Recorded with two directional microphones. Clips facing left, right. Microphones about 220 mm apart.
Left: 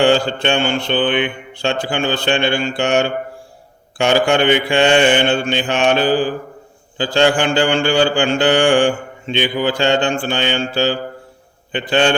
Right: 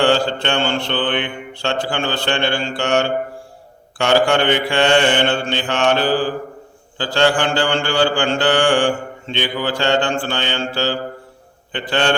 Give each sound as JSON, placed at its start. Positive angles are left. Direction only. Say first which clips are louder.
{"t": 0.0, "sound": "mantra", "louder": "left 2 dB", "side_deg": 15}